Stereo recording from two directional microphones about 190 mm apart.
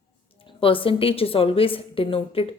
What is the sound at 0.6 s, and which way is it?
A woman's voice, 30° left (ahead or behind).